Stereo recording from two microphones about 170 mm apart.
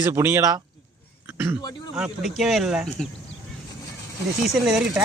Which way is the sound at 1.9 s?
5° right (ahead or behind).